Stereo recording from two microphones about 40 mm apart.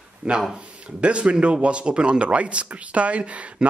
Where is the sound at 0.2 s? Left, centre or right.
Right.